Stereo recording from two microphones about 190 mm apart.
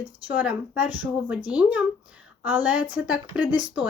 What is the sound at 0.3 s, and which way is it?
A woman's voice, 10° right (ahead or behind).